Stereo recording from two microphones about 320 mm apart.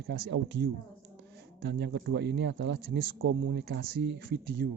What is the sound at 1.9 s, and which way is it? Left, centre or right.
Speech, right.